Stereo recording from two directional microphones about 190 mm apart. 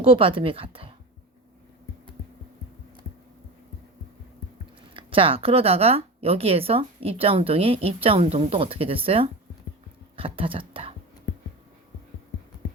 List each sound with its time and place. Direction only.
0.0 s speech: 30° right (ahead or behind)
4.9 s a woman's voice: 30° right (ahead or behind)